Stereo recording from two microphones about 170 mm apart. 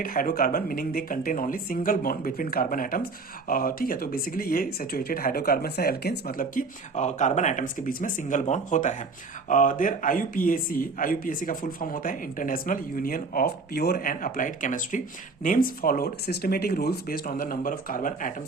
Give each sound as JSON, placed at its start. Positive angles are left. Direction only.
{"t": 0.0, "sound": "speech", "side_deg": 55}